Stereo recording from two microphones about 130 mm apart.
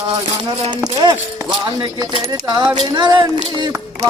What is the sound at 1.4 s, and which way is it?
Speech, 30° right (ahead or behind).